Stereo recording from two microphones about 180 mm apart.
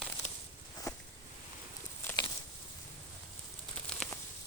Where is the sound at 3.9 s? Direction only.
5° left (ahead or behind).